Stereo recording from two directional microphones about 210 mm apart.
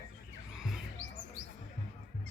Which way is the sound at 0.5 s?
5° right (ahead or behind).